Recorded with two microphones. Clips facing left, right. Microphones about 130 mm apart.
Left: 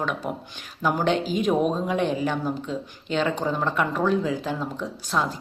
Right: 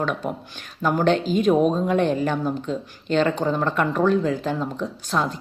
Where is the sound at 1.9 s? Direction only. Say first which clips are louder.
Right 4 dB; 50° right (ahead or behind).